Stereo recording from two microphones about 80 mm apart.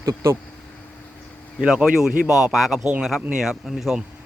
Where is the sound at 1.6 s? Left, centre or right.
Centre.